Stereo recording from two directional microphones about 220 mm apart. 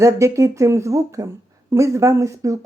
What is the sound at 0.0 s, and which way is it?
Speech, 15° right (ahead or behind).